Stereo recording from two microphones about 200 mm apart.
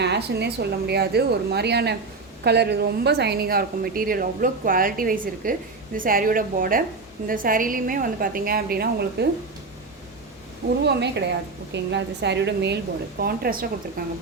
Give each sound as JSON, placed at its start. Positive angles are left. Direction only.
{"t": 0.0, "sound": "a woman's voice", "side_deg": -55}
{"t": 11.7, "sound": "a woman's voice", "side_deg": -60}